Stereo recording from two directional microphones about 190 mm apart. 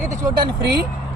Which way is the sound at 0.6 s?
60° right (ahead or behind).